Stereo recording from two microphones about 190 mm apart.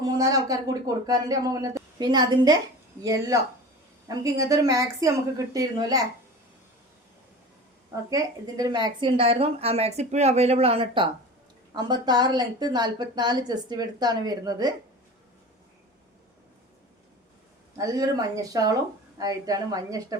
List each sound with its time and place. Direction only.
0.0 s a woman's voice: 20° right (ahead or behind)
8.1 s a woman's voice: 20° right (ahead or behind)
17.7 s a woman's voice: 20° right (ahead or behind)